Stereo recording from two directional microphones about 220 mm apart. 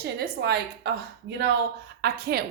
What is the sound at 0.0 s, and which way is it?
A woman's voice, 50° right (ahead or behind).